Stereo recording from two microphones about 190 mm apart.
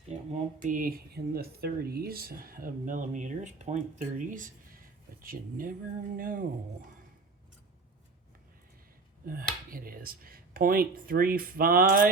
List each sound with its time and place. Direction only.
0.1 s speech: 40° right (ahead or behind)
9.2 s speech: 50° right (ahead or behind)